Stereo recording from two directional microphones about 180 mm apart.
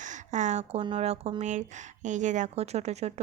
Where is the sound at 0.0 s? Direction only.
40° right (ahead or behind).